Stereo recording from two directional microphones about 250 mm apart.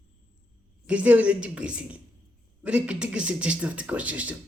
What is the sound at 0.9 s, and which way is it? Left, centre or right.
Speech, centre.